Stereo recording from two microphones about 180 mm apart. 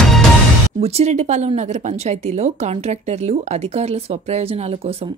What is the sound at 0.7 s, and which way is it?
A woman's voice, 35° right (ahead or behind).